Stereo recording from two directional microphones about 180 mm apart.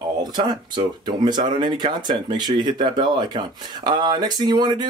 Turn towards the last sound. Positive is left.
turn(degrees=-25)  # may be behind; listen again after turning